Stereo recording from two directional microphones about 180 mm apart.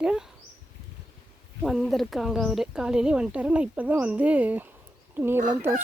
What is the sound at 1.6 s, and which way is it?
Speech, centre (ahead or behind).